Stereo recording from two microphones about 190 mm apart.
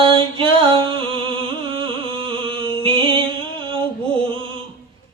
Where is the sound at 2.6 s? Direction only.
25° right (ahead or behind).